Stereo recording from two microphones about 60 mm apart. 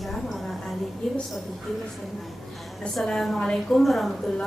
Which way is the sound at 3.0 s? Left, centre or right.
Centre.